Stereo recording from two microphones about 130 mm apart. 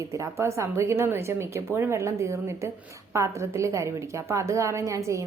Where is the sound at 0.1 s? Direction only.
20° right (ahead or behind).